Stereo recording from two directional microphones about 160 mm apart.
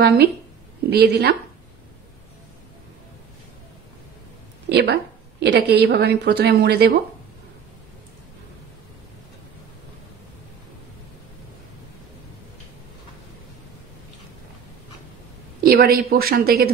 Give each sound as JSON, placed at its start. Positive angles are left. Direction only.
{"t": 0.0, "sound": "a woman's voice", "side_deg": -85}
{"t": 4.6, "sound": "a woman's voice", "side_deg": -90}
{"t": 15.6, "sound": "speech", "side_deg": -70}